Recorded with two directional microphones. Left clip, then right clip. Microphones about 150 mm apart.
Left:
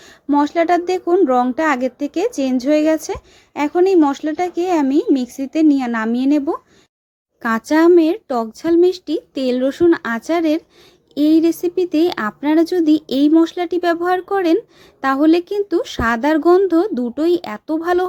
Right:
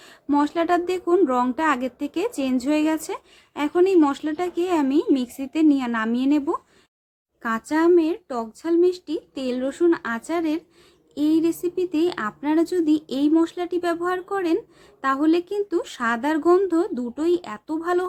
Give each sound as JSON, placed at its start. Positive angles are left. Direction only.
{"t": 0.0, "sound": "speech", "side_deg": 25}
{"t": 7.4, "sound": "speech", "side_deg": 45}